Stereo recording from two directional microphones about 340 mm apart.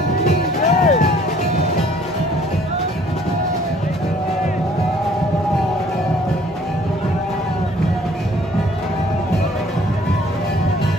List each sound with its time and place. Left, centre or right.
0.3 s music: centre